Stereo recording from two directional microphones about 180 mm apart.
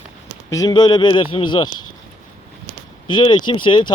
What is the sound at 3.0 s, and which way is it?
Speech, 25° left (ahead or behind).